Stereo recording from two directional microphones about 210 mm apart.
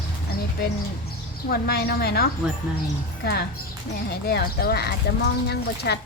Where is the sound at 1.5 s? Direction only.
45° left (ahead or behind).